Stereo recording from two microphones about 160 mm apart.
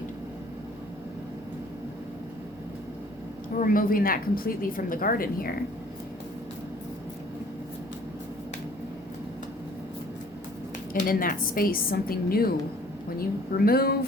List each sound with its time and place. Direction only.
3.6 s a woman's voice: 60° left (ahead or behind)
11.0 s a woman's voice: 60° left (ahead or behind)